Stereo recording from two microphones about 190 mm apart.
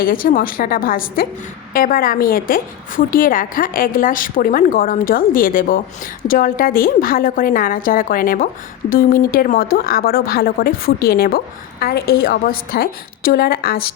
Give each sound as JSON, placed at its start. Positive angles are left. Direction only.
{"t": 0.0, "sound": "a woman's voice", "side_deg": 50}